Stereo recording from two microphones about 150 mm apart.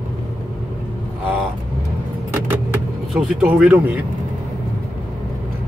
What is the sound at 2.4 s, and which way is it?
Vehicle, 10° right (ahead or behind).